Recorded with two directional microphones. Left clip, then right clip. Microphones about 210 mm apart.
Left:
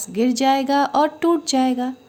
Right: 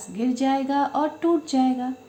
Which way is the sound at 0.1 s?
55° left (ahead or behind).